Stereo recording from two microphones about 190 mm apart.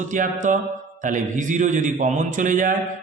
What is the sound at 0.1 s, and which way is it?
A man's voice, 40° right (ahead or behind).